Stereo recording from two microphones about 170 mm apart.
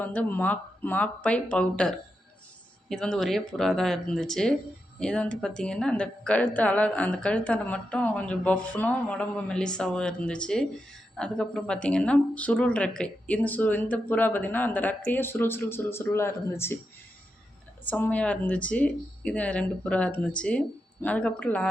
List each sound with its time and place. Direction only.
0.0 s a woman's voice: 10° left (ahead or behind)
17.8 s a woman's voice: 10° left (ahead or behind)